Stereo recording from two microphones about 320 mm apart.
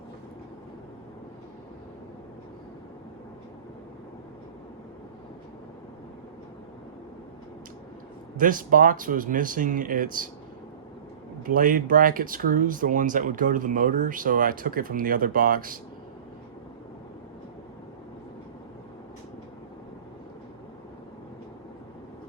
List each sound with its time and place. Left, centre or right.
8.4 s speech: right
11.4 s speech: right